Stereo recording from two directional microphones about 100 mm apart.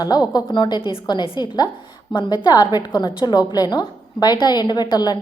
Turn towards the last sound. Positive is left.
turn(degrees=45)  # may be behind; listen again after turning